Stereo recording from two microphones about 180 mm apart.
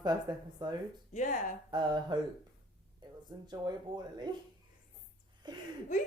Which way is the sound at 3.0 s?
25° right (ahead or behind).